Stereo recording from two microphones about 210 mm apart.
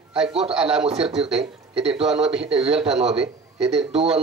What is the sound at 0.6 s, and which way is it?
Speech, 5° right (ahead or behind).